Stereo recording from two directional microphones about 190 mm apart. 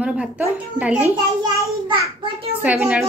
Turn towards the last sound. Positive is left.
turn(degrees=-10)  # may be behind; listen again after turning